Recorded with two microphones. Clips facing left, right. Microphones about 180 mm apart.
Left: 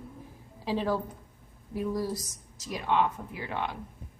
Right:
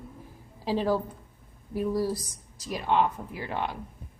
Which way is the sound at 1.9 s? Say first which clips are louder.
Right 4 dB; 35° right (ahead or behind).